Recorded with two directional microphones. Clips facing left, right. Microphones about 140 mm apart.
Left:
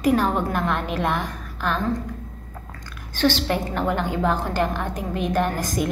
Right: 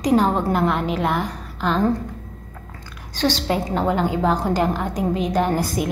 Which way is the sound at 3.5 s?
20° right (ahead or behind).